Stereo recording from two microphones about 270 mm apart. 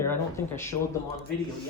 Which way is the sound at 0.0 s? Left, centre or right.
Centre.